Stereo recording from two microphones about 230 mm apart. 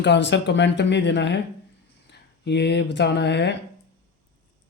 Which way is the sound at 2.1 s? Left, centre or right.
Left.